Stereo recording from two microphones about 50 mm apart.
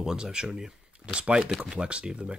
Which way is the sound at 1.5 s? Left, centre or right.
Centre.